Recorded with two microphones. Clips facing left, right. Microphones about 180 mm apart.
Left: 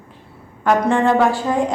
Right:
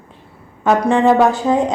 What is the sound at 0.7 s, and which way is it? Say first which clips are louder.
A woman's voice: right 3 dB; 20° right (ahead or behind).